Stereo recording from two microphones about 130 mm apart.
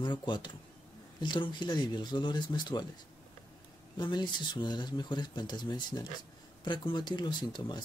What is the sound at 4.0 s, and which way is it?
Speech, 35° left (ahead or behind).